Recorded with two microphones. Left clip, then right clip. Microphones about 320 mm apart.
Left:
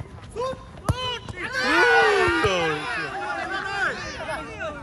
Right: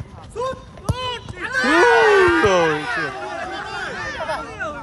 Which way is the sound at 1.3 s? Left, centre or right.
Right.